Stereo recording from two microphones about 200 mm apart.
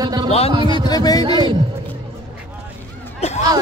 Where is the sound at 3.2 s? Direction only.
35° left (ahead or behind).